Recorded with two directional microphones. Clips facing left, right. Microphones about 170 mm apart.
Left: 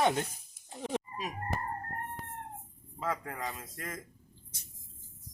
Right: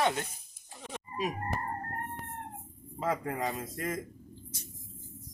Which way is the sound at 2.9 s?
25° right (ahead or behind).